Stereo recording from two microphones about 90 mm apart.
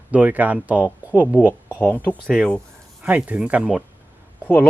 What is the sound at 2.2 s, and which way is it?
Speech, 5° left (ahead or behind).